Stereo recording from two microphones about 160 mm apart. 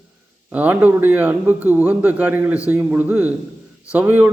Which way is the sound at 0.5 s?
10° right (ahead or behind).